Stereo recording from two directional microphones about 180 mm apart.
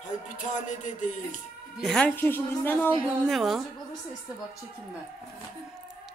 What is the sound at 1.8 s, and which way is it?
A woman's voice, 5° left (ahead or behind).